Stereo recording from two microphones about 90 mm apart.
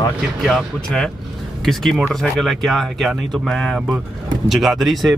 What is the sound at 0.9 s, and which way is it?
Speech, 10° left (ahead or behind).